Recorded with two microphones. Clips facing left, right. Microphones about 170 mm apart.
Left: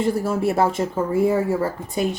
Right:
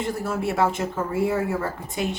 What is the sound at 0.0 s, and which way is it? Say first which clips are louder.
Speech: left 5 dB; 35° left (ahead or behind).